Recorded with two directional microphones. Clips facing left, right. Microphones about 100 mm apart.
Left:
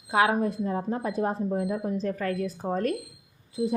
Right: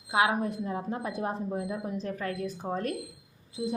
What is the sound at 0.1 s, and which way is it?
A woman's voice, 40° left (ahead or behind).